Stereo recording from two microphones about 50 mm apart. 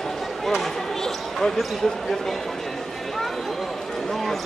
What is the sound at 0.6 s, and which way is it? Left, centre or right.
Basketball bounce, centre.